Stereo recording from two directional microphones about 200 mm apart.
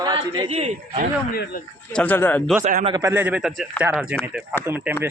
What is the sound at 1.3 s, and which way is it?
Speech, 50° left (ahead or behind).